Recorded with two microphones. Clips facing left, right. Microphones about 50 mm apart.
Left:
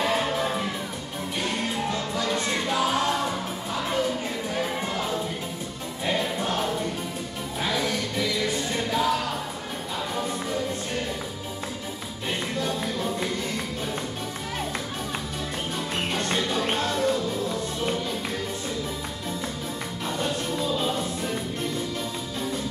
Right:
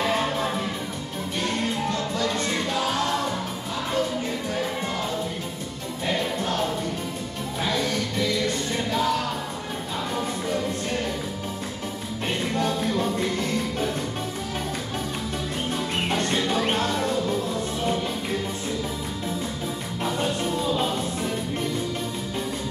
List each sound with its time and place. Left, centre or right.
0.0 s music: centre
6.0 s music: centre
16.3 s music: centre